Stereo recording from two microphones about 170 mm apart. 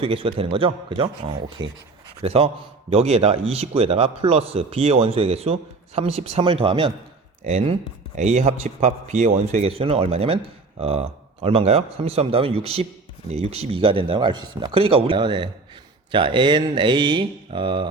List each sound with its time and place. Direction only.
0.0 s a man's voice: 30° right (ahead or behind)